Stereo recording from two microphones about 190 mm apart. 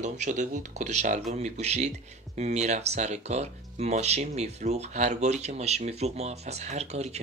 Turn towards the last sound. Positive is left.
turn(degrees=-35)  # may be behind; listen again after turning